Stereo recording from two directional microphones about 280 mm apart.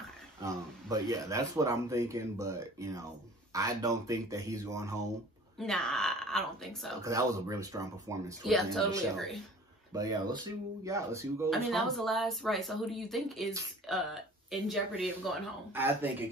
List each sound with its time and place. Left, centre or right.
0.4 s speech: centre
5.6 s speech: centre
7.0 s speech: centre
8.5 s speech: centre
9.9 s speech: centre
11.5 s speech: centre